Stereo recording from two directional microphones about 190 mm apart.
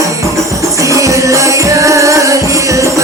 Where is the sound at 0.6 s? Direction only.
15° right (ahead or behind).